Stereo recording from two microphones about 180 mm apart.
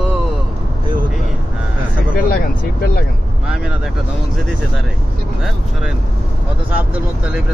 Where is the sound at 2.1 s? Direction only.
55° left (ahead or behind).